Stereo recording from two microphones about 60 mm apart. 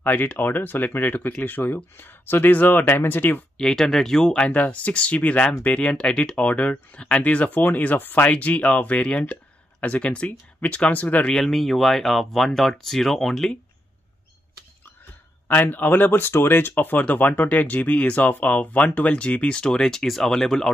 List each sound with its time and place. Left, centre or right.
0.0 s speech: left
3.5 s speech: centre
4.4 s speech: left
11.2 s speech: centre
15.4 s speech: left; by 20.7 s centre